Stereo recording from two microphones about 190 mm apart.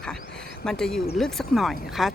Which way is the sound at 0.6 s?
5° left (ahead or behind).